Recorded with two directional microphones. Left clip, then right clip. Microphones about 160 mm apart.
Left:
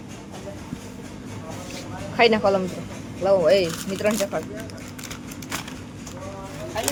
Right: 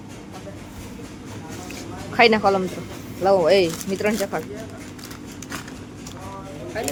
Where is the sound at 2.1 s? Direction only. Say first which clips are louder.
Right 2 dB; 15° right (ahead or behind).